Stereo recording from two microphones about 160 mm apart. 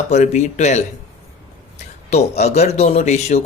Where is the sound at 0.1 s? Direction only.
45° left (ahead or behind).